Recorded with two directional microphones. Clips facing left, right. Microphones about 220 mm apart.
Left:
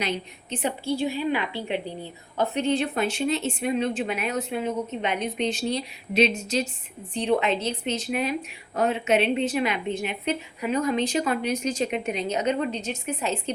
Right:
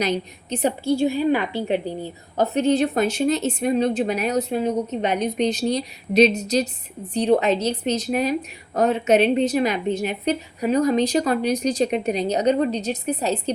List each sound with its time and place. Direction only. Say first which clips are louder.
0.0 s a woman's voice: right 6 dB; 40° right (ahead or behind)